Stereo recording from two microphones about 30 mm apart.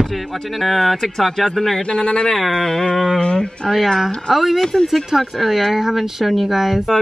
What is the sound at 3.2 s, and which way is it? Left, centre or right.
Speech, left.